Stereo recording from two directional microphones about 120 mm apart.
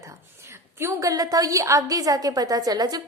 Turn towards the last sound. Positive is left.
turn(degrees=-35)  # may be behind; listen again after turning